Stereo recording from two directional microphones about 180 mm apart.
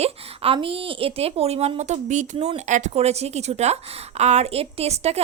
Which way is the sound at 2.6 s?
40° right (ahead or behind).